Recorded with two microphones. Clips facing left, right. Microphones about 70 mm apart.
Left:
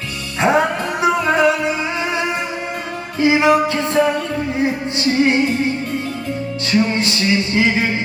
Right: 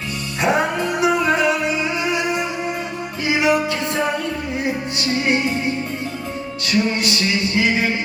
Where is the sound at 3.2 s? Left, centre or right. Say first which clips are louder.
Left 5 dB; left.